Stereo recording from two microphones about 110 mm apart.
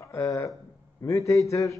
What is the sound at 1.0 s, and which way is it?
Speech, 30° left (ahead or behind).